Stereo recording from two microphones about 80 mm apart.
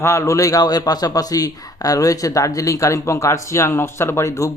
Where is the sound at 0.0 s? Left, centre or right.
Left.